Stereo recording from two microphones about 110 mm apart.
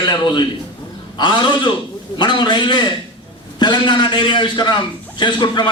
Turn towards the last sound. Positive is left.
turn(degrees=45)  # may be behind; listen again after turning